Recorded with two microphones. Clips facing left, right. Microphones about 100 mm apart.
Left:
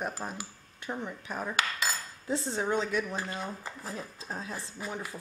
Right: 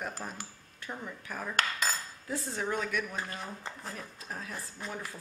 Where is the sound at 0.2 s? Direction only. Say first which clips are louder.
Left 3 dB; 20° left (ahead or behind).